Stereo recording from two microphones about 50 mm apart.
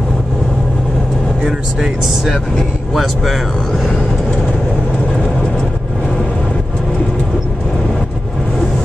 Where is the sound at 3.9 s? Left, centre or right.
Left.